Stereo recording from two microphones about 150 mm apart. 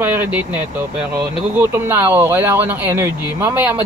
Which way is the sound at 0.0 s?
15° right (ahead or behind).